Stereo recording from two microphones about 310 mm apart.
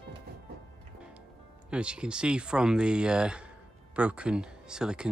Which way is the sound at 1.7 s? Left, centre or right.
Centre.